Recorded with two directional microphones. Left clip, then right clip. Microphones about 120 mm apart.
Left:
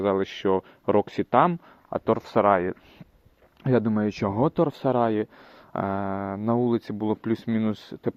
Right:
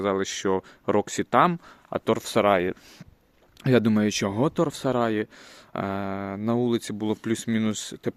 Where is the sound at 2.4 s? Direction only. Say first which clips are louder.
Even; 50° right (ahead or behind).